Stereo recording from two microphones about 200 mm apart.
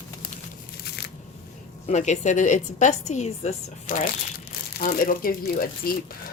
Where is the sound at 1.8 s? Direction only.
35° left (ahead or behind).